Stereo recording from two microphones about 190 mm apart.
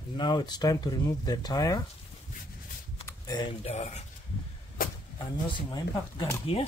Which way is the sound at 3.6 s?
35° left (ahead or behind).